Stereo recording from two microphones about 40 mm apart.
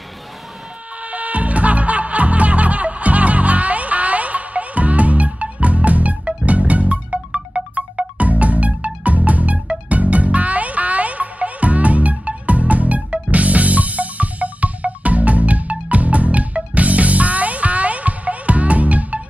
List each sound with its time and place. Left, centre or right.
1.0 s music: right